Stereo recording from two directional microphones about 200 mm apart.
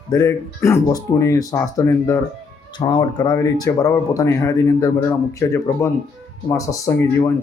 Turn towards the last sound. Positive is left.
turn(degrees=15)  # may be behind; listen again after turning